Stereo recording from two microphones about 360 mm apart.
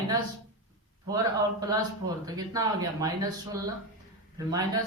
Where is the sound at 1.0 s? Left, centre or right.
Centre.